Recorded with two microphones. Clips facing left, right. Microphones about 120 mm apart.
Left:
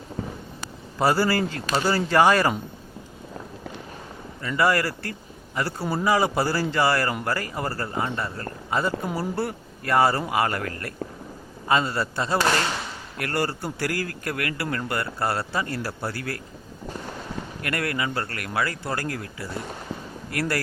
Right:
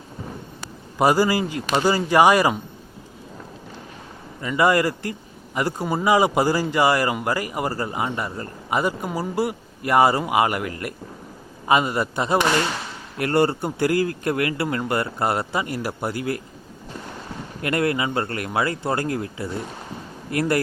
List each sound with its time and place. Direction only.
0.9 s a man's voice: 15° right (ahead or behind)
4.4 s a man's voice: 20° right (ahead or behind)
17.6 s speech: 25° right (ahead or behind)